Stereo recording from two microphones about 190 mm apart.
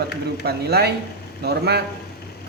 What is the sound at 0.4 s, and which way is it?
Speech, 55° right (ahead or behind).